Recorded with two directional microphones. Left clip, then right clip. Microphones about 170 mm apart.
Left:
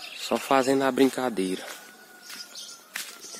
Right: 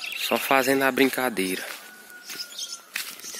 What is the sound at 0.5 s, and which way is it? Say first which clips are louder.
Speech: right 1 dB; 15° left (ahead or behind).